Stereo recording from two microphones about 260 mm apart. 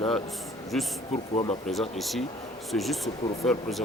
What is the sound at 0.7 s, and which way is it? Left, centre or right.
Speech, centre.